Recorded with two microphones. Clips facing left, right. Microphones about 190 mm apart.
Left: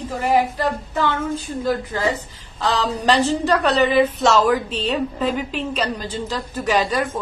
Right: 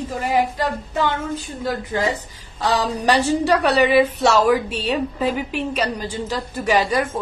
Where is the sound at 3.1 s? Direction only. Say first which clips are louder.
Right 2 dB; 10° right (ahead or behind).